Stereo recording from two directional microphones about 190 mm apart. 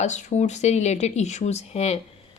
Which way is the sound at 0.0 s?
40° left (ahead or behind).